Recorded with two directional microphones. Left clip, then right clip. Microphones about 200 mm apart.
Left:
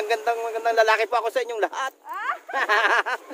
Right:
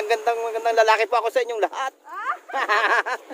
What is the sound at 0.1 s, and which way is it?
Speech, 20° right (ahead or behind).